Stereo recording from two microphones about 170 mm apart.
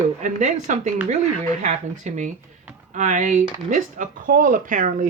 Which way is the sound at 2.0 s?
45° right (ahead or behind).